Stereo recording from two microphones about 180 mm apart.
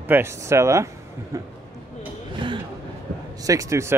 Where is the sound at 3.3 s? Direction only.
20° right (ahead or behind).